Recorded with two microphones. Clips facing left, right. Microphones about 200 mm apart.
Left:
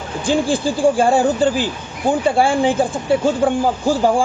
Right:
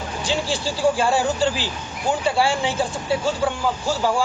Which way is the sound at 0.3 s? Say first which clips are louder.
Left 8 dB; 55° left (ahead or behind).